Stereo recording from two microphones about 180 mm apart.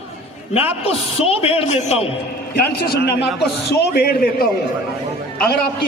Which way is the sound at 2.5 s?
60° left (ahead or behind).